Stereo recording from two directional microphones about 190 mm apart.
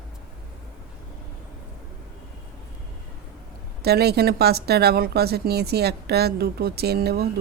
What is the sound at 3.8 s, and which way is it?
Speech, 55° right (ahead or behind).